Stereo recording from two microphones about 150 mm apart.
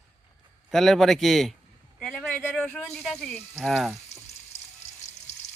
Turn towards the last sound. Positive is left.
turn(degrees=0)  # may be behind; listen again after turning